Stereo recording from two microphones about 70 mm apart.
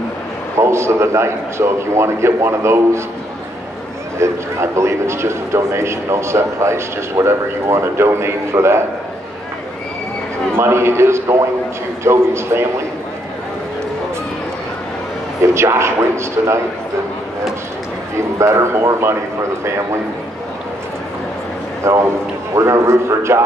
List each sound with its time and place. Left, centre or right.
0.6 s a man's voice: right
4.2 s a man's voice: right
10.5 s a man's voice: right
15.5 s a man's voice: right
18.4 s a man's voice: right
21.8 s a man's voice: right